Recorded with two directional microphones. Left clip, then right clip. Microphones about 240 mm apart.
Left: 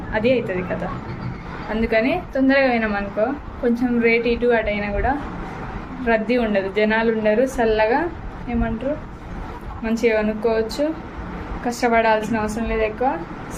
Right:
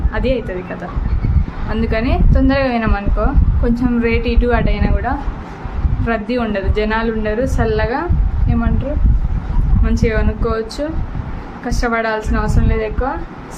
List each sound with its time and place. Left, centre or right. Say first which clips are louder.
0.1 s a woman's voice: even; centre
1.7 s a woman's voice: even; centre
9.8 s a woman's voice: left 1 dB; centre